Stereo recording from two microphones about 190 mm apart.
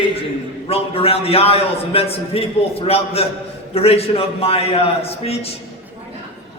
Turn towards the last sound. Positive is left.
turn(degrees=30)  # may be behind; listen again after turning